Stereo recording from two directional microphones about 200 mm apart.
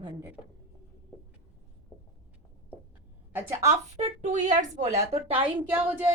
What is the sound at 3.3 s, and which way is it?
Speech, 15° right (ahead or behind).